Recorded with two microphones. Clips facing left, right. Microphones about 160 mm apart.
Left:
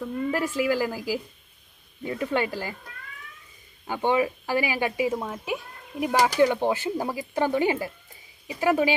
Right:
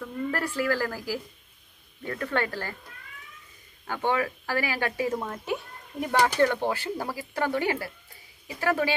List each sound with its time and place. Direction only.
0.0 s a sound: 15° left (ahead or behind)
0.6 s speech: 15° left (ahead or behind)
3.8 s speech: 15° left (ahead or behind)